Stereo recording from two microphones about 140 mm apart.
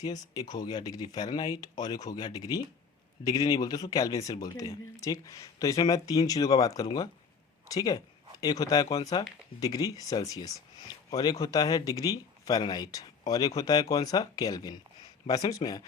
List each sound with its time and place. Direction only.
0.0 s speech: 30° left (ahead or behind)